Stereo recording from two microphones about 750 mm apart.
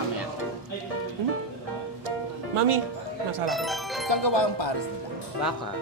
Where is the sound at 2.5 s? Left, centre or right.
Right.